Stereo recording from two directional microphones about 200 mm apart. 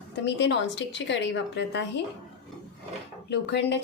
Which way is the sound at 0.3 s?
60° left (ahead or behind).